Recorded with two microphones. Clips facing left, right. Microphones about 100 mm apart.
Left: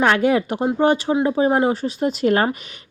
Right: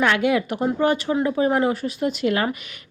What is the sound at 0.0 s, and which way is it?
Speech, 35° left (ahead or behind).